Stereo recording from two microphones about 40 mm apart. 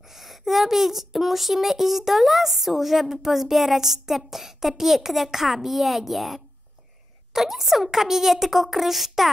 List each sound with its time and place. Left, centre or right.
0.1 s speech: centre